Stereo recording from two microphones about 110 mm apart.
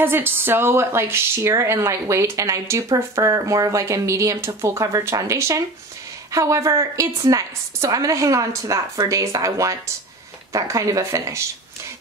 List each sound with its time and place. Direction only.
0.0 s speech: 20° right (ahead or behind)